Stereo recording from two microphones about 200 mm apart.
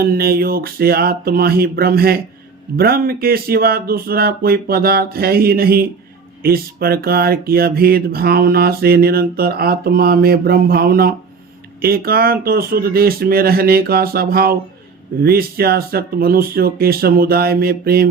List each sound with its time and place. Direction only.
0.0 s speech: 50° right (ahead or behind)